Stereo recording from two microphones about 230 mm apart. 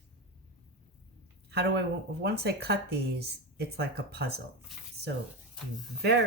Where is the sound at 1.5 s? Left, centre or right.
Right.